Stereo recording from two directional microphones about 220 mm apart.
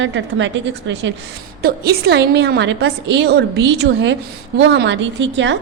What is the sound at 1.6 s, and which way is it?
A woman's voice, 45° right (ahead or behind).